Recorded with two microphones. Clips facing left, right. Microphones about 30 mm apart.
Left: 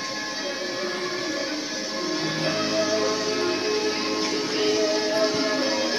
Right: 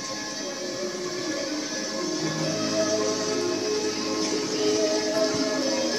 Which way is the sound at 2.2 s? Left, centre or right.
Left.